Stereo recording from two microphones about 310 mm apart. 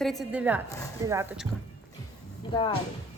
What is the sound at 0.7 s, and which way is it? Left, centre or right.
Speech, centre.